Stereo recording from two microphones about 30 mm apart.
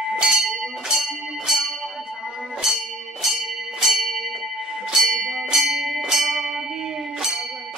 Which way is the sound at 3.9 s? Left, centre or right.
Centre.